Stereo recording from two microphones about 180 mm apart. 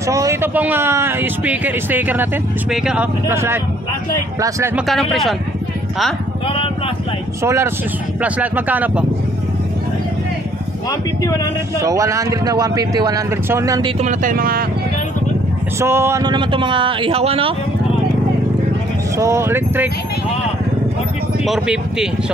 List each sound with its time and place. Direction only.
0.0 s speech: 15° right (ahead or behind)
4.7 s speech: centre (ahead or behind)
6.4 s speech: 30° left (ahead or behind)
7.4 s speech: 15° right (ahead or behind)
10.9 s speech: 20° left (ahead or behind)
11.8 s speech: 15° right (ahead or behind)
13.9 s speech: 45° right (ahead or behind)
15.8 s speech: 15° right (ahead or behind); by 17.6 s 30° right (ahead or behind)
19.1 s speech: 15° right (ahead or behind)
21.5 s speech: 5° right (ahead or behind)